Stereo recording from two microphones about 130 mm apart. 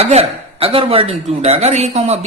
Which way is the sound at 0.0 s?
50° right (ahead or behind).